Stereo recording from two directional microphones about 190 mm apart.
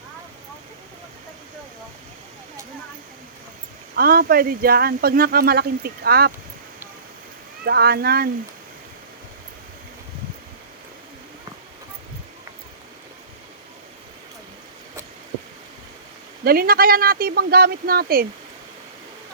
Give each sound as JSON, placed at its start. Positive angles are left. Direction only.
{"t": 3.9, "sound": "speech", "side_deg": -50}
{"t": 7.6, "sound": "speech", "side_deg": -55}
{"t": 16.4, "sound": "speech", "side_deg": -50}